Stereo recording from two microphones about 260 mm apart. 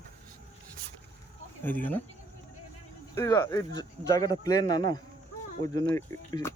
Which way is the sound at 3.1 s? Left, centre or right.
Centre.